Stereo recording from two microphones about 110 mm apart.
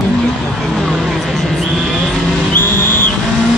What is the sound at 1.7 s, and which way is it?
Vehicle, 5° left (ahead or behind).